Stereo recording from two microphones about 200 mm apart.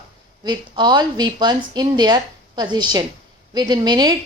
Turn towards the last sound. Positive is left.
turn(degrees=-20)  # may be behind; listen again after turning